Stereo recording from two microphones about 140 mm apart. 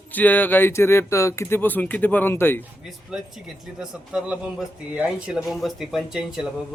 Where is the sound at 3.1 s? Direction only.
5° right (ahead or behind).